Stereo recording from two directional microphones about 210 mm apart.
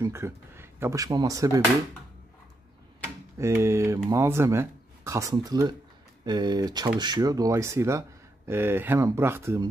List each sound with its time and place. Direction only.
0.0 s speech: 15° right (ahead or behind)
3.3 s speech: 15° right (ahead or behind)